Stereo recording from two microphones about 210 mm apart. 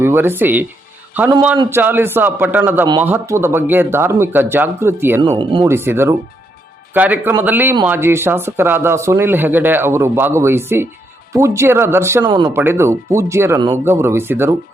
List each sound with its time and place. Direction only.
0.0 s speech: 10° right (ahead or behind)
1.7 s speech: 10° right (ahead or behind)
5.2 s speech: 20° right (ahead or behind)
5.6 s speech: 10° right (ahead or behind)